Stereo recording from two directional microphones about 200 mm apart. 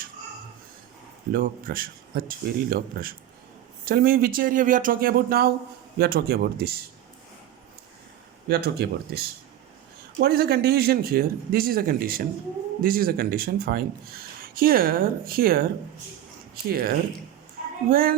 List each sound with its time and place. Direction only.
1.3 s speech: 45° right (ahead or behind)
8.4 s speech: 50° right (ahead or behind)